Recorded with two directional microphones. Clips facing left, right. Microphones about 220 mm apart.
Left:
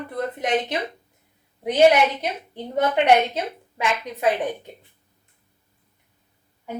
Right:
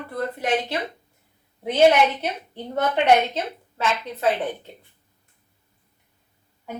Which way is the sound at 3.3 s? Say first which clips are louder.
Left 1 dB; 15° left (ahead or behind).